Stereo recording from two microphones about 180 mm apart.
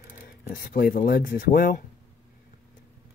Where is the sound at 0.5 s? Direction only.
55° left (ahead or behind).